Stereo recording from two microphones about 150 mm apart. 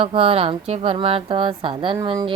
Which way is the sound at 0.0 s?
40° right (ahead or behind).